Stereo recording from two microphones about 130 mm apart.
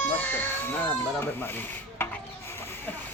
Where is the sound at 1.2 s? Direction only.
15° left (ahead or behind).